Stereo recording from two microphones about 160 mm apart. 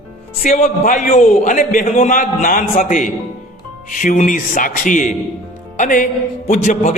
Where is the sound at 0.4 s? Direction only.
45° left (ahead or behind).